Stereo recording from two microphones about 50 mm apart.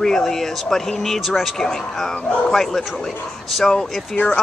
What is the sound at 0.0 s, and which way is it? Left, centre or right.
Speech, centre.